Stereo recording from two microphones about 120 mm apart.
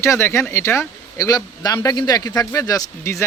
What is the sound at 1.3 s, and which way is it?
A man's voice, 30° left (ahead or behind).